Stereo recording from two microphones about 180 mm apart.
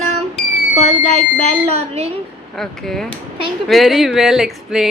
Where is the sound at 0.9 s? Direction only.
35° right (ahead or behind).